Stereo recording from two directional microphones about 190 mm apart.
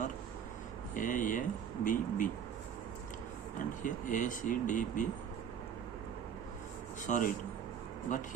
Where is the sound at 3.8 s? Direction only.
45° left (ahead or behind).